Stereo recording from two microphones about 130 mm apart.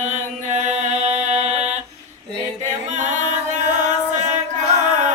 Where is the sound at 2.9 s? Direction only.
70° right (ahead or behind).